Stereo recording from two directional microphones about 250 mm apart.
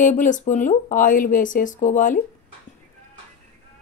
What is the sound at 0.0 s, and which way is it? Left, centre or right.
A woman's voice, left.